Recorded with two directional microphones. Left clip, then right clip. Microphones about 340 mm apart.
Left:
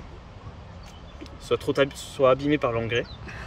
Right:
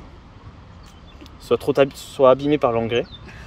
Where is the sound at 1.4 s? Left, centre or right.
Centre.